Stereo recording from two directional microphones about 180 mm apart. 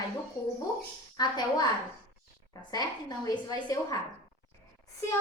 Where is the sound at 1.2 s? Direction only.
25° left (ahead or behind).